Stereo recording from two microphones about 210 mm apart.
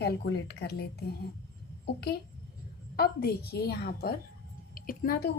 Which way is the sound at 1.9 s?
50° left (ahead or behind).